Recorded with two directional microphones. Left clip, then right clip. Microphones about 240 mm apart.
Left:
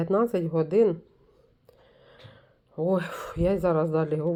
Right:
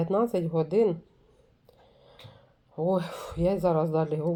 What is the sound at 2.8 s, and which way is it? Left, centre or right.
Speech, centre.